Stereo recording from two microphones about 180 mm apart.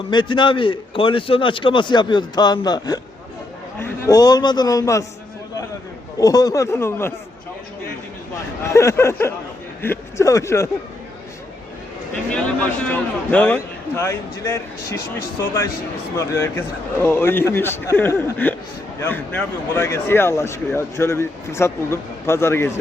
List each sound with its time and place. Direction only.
0.1 s a man's voice: 25° left (ahead or behind)
6.1 s speech: 20° left (ahead or behind)
8.6 s speech: 15° left (ahead or behind)
12.1 s speech: 5° left (ahead or behind)